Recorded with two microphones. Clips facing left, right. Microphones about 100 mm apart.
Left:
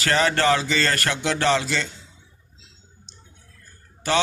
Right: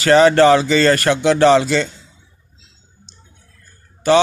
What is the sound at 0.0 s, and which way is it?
Speech, 25° right (ahead or behind).